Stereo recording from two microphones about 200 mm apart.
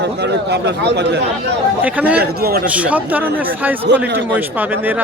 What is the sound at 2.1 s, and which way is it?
Speech, 50° right (ahead or behind).